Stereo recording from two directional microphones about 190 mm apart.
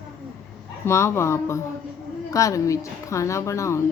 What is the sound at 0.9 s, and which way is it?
A woman's voice, 15° left (ahead or behind).